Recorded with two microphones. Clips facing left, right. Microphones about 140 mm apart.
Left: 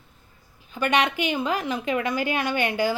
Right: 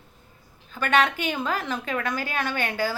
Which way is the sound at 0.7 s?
15° left (ahead or behind).